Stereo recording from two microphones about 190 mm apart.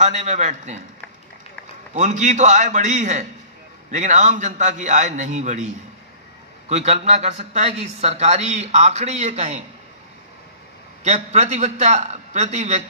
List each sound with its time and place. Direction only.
0.0 s a man's voice: 35° right (ahead or behind)
2.0 s a man's voice: 40° right (ahead or behind)
6.7 s a man's voice: 35° right (ahead or behind)
11.1 s a man's voice: 35° right (ahead or behind)